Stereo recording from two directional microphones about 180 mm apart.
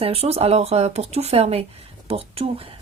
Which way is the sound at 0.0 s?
35° right (ahead or behind).